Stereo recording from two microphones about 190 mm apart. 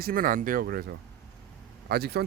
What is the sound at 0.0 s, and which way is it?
Speech, 50° right (ahead or behind).